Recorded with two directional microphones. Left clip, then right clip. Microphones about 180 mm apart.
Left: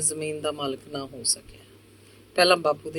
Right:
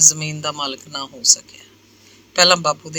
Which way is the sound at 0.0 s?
25° right (ahead or behind).